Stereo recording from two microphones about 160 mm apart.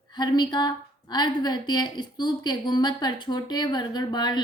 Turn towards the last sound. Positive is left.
turn(degrees=25)  # may be behind; listen again after turning